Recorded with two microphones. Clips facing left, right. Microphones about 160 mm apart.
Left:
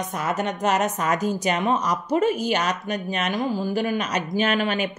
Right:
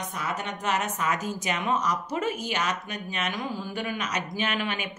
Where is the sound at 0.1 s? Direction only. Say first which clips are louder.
Left 7 dB; 45° left (ahead or behind).